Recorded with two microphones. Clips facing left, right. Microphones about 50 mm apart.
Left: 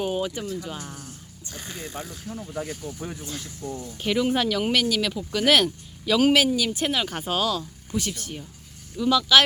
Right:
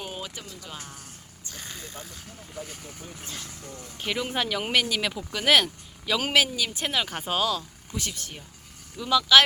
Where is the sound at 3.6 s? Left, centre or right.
Right.